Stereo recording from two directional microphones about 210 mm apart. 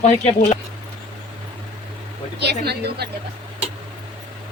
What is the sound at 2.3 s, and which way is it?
Speech, 50° right (ahead or behind).